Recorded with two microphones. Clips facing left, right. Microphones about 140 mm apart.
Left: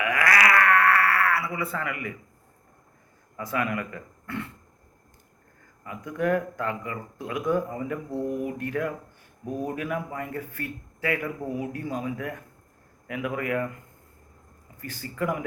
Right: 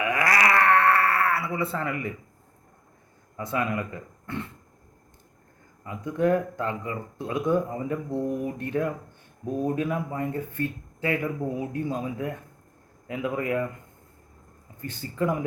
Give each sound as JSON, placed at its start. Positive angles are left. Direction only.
{"t": 0.0, "sound": "a sound", "side_deg": -25}
{"t": 3.3, "sound": "speech", "side_deg": -25}
{"t": 5.8, "sound": "speech", "side_deg": -25}
{"t": 14.8, "sound": "speech", "side_deg": -25}